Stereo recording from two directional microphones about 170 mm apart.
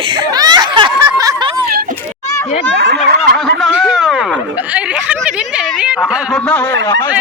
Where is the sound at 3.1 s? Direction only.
65° right (ahead or behind).